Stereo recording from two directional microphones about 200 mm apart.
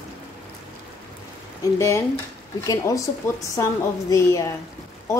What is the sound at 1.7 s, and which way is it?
A woman's voice, 15° left (ahead or behind).